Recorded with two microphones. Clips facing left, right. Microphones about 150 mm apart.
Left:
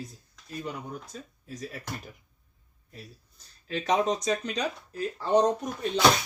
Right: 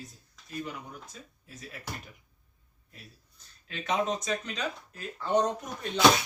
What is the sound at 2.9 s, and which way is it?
Speech, 35° left (ahead or behind).